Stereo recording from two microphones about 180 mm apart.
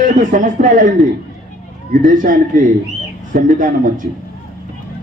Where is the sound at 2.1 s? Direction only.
45° right (ahead or behind).